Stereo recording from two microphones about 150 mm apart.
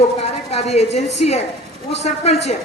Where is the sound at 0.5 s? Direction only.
45° left (ahead or behind).